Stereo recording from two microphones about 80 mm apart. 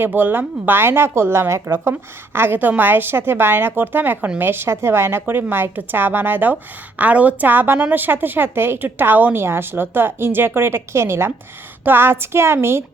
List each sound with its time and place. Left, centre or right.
0.0 s a woman's voice: right